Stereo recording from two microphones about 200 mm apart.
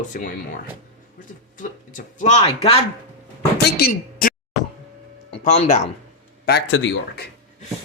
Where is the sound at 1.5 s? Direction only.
40° left (ahead or behind).